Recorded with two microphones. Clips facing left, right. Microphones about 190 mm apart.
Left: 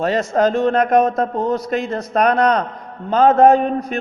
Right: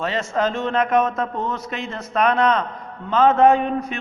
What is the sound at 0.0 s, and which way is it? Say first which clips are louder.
A man's voice: left 6 dB; 40° left (ahead or behind).